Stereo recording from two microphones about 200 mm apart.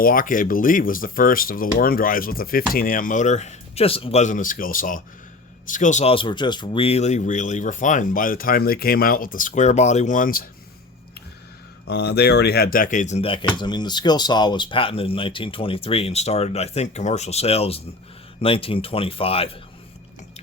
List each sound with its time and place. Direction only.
0.0 s speech: 45° left (ahead or behind)
11.9 s speech: 55° left (ahead or behind); by 19.5 s 30° left (ahead or behind)